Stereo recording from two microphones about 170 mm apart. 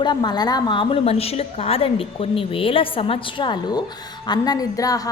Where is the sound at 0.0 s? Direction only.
25° left (ahead or behind).